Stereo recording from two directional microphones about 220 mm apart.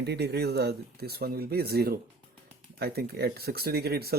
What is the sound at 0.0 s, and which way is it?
Speech, 50° right (ahead or behind).